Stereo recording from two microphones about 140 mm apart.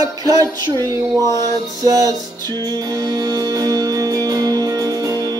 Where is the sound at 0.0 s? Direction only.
25° right (ahead or behind).